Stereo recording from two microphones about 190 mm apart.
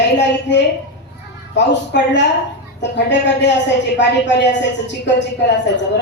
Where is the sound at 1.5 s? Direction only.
65° left (ahead or behind).